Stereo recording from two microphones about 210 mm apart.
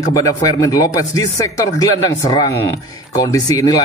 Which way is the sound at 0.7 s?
15° left (ahead or behind).